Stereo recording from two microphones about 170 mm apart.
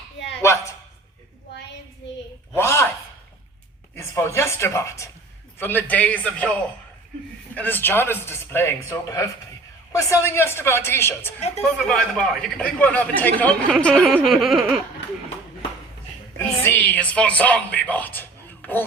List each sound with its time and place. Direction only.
2.6 s a sound: 15° left (ahead or behind)
3.9 s a man's voice: 15° left (ahead or behind)
7.5 s a man's voice: 10° left (ahead or behind)
11.3 s a woman's voice: 40° left (ahead or behind)
11.6 s a man's voice: 5° left (ahead or behind)
14.2 s a sound: centre (ahead or behind)
16.6 s a man's voice: 10° left (ahead or behind)